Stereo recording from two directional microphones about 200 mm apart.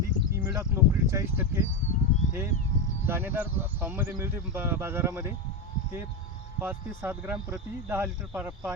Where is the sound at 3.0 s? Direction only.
10° right (ahead or behind).